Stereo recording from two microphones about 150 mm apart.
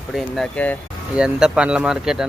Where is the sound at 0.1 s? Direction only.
Centre (ahead or behind).